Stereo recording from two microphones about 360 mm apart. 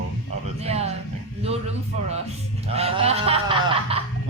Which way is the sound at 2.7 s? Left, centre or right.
Centre.